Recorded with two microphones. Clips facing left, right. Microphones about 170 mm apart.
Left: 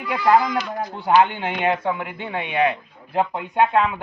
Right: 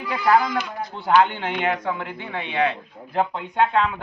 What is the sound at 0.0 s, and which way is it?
Speech, 15° left (ahead or behind).